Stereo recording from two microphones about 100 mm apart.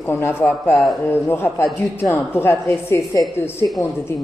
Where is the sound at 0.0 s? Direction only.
25° left (ahead or behind).